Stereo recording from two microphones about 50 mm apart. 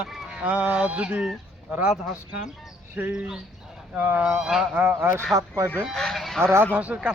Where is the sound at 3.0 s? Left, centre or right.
Right.